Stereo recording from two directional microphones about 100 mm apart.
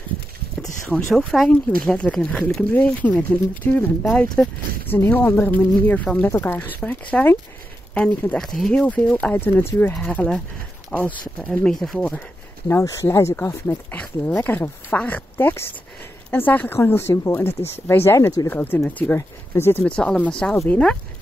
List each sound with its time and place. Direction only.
0.6 s speech: 5° left (ahead or behind)
4.0 s speech: 5° left (ahead or behind)
4.8 s speech: 20° left (ahead or behind)
12.8 s speech: 30° left (ahead or behind)
18.5 s speech: 20° left (ahead or behind)
19.8 s speech: 10° left (ahead or behind)